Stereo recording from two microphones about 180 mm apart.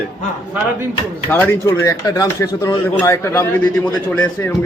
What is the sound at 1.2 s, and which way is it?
Speech, 10° left (ahead or behind).